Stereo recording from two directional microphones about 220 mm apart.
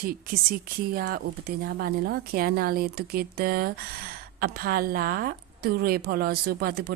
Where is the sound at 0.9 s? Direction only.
45° right (ahead or behind).